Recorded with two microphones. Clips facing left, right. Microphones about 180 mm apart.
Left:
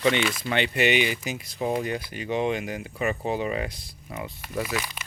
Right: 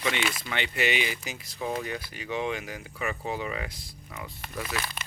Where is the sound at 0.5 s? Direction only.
20° left (ahead or behind).